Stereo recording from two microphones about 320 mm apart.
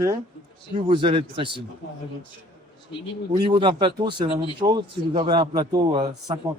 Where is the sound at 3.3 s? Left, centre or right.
Centre.